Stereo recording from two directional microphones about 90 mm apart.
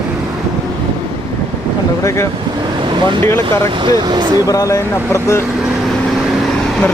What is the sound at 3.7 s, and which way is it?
Speech, 60° right (ahead or behind).